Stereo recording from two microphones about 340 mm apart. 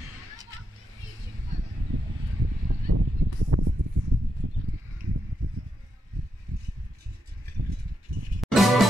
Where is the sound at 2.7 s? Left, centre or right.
Right.